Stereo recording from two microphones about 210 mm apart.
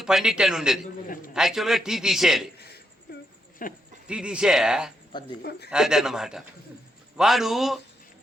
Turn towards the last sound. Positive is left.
turn(degrees=0)  # may be behind; listen again after turning